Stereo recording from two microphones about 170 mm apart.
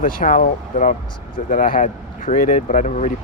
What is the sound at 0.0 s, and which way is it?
Speech, 50° left (ahead or behind).